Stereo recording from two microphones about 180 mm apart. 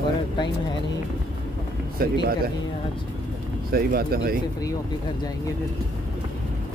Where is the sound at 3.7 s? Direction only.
55° right (ahead or behind).